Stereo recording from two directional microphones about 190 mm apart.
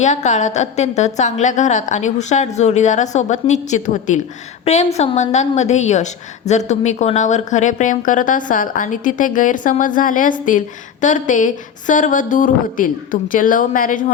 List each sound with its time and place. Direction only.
0.0 s a woman's voice: 40° left (ahead or behind)